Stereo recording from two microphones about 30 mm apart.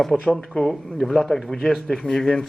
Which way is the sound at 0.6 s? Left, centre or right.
Left.